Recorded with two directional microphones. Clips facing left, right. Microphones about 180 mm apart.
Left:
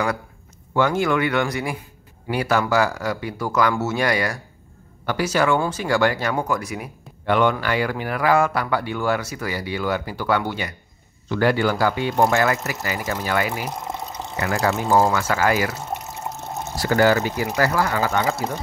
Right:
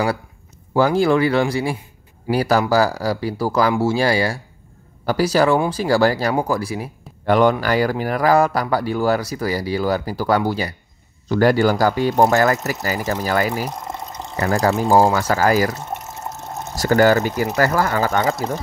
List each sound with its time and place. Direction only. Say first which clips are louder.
0.7 s speech: right 4 dB; 35° right (ahead or behind)
13.7 s water: even; 5° left (ahead or behind)
14.3 s speech: right 4 dB; 35° right (ahead or behind)
16.8 s speech: right 3 dB; 45° right (ahead or behind)